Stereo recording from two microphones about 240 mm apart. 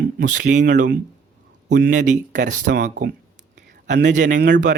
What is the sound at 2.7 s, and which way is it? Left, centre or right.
Speech, right.